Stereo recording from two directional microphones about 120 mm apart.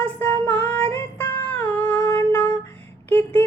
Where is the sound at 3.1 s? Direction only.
15° left (ahead or behind).